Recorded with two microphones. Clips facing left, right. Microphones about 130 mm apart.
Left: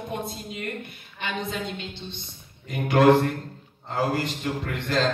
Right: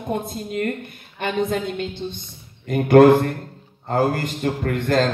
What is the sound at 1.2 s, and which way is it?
A man's voice, 50° right (ahead or behind).